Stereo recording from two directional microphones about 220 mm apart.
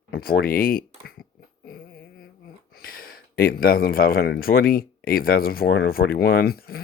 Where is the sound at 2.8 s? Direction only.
40° left (ahead or behind).